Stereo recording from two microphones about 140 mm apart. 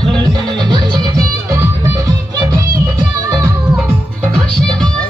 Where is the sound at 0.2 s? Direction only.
30° right (ahead or behind).